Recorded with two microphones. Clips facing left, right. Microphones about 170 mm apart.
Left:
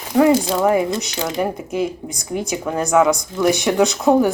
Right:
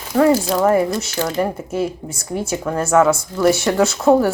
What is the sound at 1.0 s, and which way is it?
Speech, 15° left (ahead or behind).